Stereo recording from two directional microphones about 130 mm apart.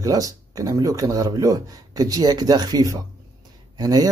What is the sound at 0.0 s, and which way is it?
Speech, 25° right (ahead or behind).